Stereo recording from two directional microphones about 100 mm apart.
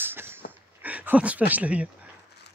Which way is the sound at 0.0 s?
20° right (ahead or behind).